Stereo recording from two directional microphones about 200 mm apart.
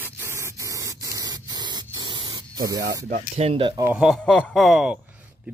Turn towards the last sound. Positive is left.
turn(degrees=0)  # may be behind; listen again after turning